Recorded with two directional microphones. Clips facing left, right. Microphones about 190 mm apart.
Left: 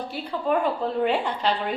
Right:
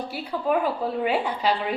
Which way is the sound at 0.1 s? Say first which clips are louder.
Even; 5° right (ahead or behind).